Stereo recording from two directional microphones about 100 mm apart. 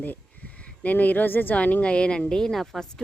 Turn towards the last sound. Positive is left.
turn(degrees=5)  # may be behind; listen again after turning